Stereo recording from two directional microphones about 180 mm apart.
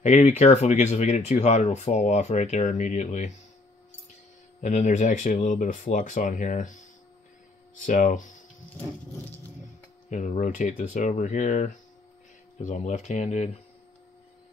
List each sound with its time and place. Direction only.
0.0 s speech: 40° left (ahead or behind)
4.6 s speech: 45° left (ahead or behind)
10.0 s speech: 45° left (ahead or behind)